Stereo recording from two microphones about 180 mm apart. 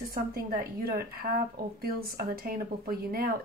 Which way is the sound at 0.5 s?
55° right (ahead or behind).